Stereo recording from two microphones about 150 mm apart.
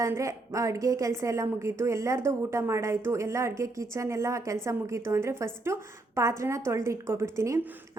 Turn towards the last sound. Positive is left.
turn(degrees=-20)  # may be behind; listen again after turning